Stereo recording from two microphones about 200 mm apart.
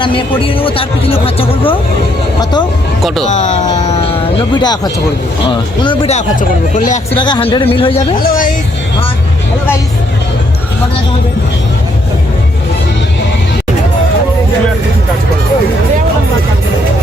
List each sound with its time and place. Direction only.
0.0 s speech: 25° left (ahead or behind)
3.2 s speech: 40° left (ahead or behind)